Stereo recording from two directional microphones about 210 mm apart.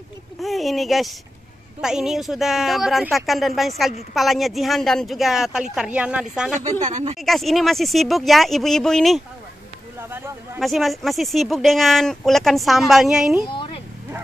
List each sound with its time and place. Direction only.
0.4 s speech: centre (ahead or behind)
6.5 s speech: 35° right (ahead or behind)
7.2 s speech: centre (ahead or behind)
9.9 s a sound: 10° right (ahead or behind)
10.6 s speech: centre (ahead or behind)
13.5 s vehicle: 25° left (ahead or behind)